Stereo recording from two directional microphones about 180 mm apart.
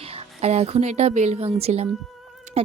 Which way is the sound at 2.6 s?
35° right (ahead or behind).